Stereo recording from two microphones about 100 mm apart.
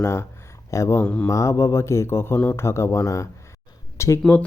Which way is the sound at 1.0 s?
10° left (ahead or behind).